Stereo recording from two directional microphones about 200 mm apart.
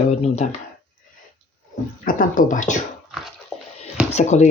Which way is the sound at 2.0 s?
45° left (ahead or behind).